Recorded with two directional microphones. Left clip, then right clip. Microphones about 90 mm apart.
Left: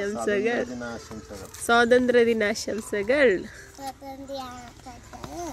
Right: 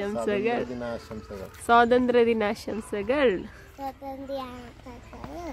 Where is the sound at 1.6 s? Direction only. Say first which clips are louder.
Even; centre (ahead or behind).